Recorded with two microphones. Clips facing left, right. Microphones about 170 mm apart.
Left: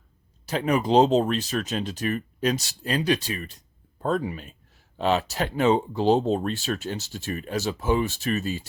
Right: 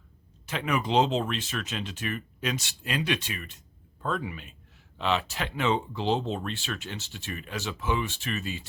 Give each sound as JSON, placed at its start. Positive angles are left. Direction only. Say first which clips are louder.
{"t": 0.4, "sound": "speech", "louder": "left 6 dB", "side_deg": 35}